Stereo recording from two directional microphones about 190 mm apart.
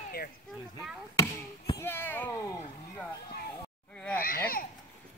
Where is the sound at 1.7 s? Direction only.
10° left (ahead or behind).